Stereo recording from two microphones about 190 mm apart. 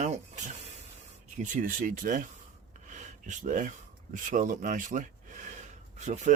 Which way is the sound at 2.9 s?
40° right (ahead or behind).